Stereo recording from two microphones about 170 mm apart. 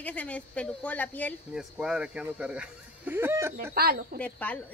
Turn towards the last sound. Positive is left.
turn(degrees=10)  # may be behind; listen again after turning